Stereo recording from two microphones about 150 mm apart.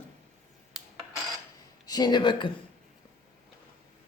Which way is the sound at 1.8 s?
25° left (ahead or behind).